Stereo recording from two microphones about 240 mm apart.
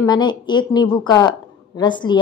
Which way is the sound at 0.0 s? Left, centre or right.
Centre.